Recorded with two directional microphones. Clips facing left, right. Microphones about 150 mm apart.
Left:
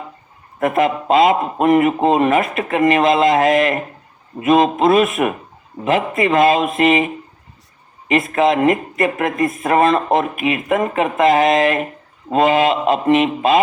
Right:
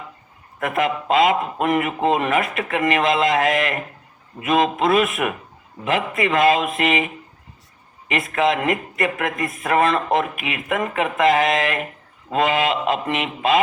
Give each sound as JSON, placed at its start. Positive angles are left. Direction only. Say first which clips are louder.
{"t": 0.6, "sound": "speech", "louder": "left 5 dB", "side_deg": 35}